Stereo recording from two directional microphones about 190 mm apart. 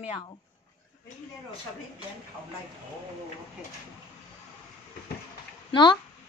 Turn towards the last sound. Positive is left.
turn(degrees=25)  # may be behind; listen again after turning